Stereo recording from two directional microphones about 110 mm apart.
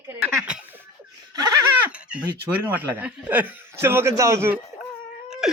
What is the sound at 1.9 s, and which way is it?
A man's voice, 10° right (ahead or behind).